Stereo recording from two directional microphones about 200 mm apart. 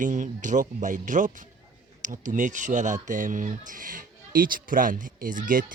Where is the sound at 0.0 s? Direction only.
40° right (ahead or behind).